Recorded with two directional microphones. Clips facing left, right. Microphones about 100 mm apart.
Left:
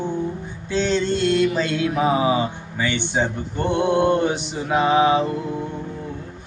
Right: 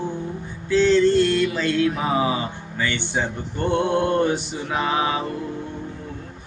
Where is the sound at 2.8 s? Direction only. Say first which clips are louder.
Left 3 dB; 15° left (ahead or behind).